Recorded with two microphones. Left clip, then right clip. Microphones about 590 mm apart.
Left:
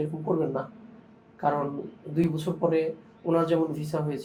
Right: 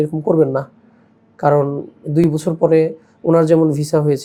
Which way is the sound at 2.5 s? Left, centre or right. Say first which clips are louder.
Right 12 dB; right.